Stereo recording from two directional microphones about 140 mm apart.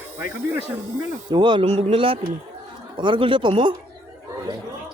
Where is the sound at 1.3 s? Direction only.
35° right (ahead or behind).